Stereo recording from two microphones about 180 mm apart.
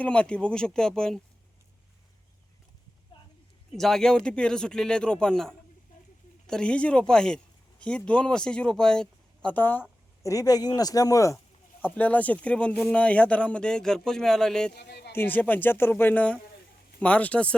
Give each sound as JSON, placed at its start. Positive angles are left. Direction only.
{"t": 0.0, "sound": "speech", "side_deg": 5}
{"t": 3.1, "sound": "a sound", "side_deg": 25}
{"t": 3.7, "sound": "speech", "side_deg": 0}
{"t": 14.7, "sound": "speech", "side_deg": 65}
{"t": 15.1, "sound": "speech", "side_deg": 10}